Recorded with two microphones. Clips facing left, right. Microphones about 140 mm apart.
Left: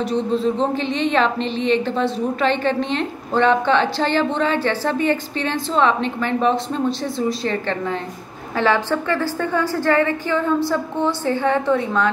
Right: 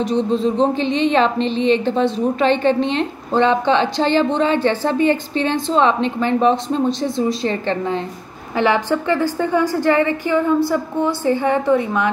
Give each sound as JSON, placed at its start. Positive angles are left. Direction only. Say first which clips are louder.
{"t": 0.1, "sound": "a woman's voice", "louder": "right 1 dB", "side_deg": -20}
{"t": 1.1, "sound": "a woman's voice", "louder": "right 3 dB", "side_deg": -30}
{"t": 8.5, "sound": "a woman's voice", "louder": "right 2 dB", "side_deg": -15}